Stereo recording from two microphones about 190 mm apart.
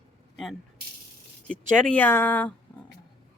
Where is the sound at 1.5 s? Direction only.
5° left (ahead or behind).